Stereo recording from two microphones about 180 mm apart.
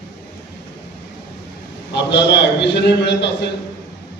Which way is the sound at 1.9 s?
75° left (ahead or behind).